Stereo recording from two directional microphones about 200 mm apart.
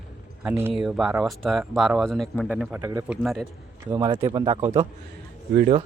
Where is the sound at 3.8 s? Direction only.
25° right (ahead or behind).